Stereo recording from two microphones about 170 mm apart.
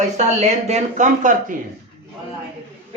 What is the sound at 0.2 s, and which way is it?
Speech, 40° right (ahead or behind).